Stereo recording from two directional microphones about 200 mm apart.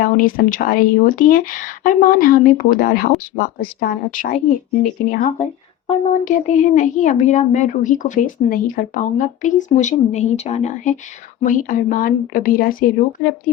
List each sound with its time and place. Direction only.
0.0 s speech: 45° left (ahead or behind)